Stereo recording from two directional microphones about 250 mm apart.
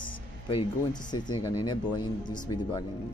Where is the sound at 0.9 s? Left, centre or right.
Centre.